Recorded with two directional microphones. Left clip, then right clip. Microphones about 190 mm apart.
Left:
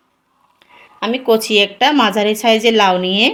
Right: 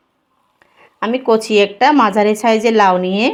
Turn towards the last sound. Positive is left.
turn(degrees=-20)  # may be behind; listen again after turning